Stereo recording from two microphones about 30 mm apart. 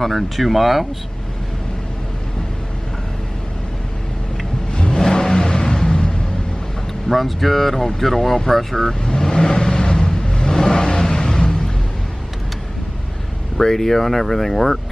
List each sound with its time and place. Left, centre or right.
0.0 s speech: centre
4.6 s vehicle: left
7.1 s speech: centre
9.0 s vehicle: left
13.7 s speech: centre